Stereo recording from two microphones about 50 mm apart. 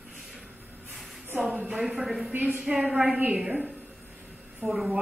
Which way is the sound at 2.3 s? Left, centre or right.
Right.